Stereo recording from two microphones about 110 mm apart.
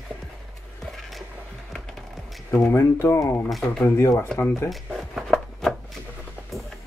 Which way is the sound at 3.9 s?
25° left (ahead or behind).